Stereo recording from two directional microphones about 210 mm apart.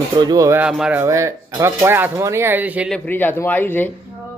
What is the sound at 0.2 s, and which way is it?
Speech, 20° right (ahead or behind).